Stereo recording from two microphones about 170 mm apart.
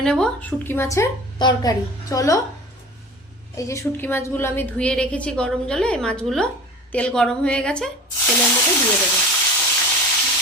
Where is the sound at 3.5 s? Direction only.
15° left (ahead or behind).